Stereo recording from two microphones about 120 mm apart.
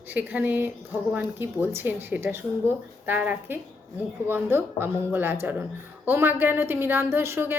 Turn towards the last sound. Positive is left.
turn(degrees=-20)  # may be behind; listen again after turning